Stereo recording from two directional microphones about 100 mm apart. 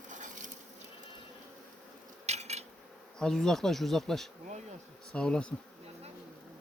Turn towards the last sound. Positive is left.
turn(degrees=10)  # may be behind; listen again after turning